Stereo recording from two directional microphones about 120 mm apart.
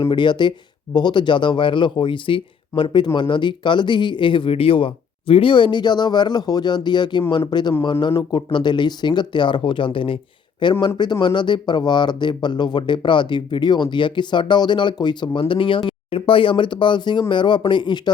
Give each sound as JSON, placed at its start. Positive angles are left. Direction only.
{"t": 0.1, "sound": "speech", "side_deg": 40}